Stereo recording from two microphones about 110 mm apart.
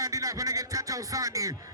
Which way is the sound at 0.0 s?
30° right (ahead or behind).